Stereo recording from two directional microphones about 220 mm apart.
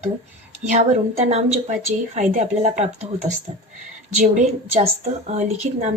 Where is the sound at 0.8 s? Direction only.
30° right (ahead or behind).